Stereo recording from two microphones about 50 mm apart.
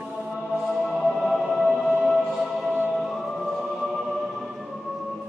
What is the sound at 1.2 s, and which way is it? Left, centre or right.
Music, centre.